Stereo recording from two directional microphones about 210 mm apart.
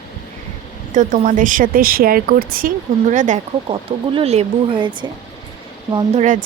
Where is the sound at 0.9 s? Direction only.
40° right (ahead or behind); by 5.1 s 20° right (ahead or behind).